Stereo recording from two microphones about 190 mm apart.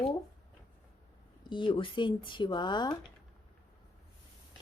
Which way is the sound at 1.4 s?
25° left (ahead or behind).